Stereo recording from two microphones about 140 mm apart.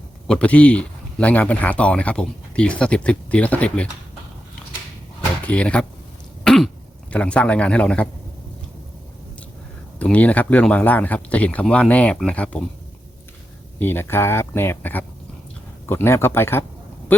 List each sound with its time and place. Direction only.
0.3 s speech: 10° left (ahead or behind)
5.5 s speech: 10° left (ahead or behind)
6.4 s cough: 5° left (ahead or behind)
7.1 s speech: 10° left (ahead or behind)
10.0 s speech: 10° left (ahead or behind)
13.7 s speech: 15° left (ahead or behind)